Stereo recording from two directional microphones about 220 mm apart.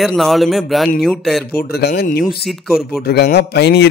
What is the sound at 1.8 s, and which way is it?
Speech, 50° left (ahead or behind).